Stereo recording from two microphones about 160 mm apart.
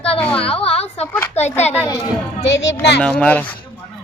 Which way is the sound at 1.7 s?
15° left (ahead or behind).